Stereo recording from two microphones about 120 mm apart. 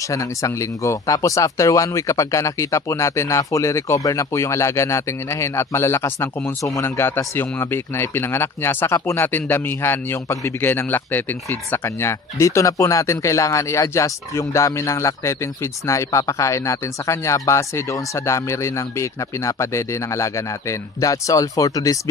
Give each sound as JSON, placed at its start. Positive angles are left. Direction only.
{"t": 0.1, "sound": "speech", "side_deg": 25}